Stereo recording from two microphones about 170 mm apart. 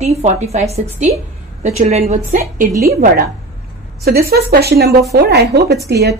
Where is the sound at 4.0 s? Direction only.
65° right (ahead or behind).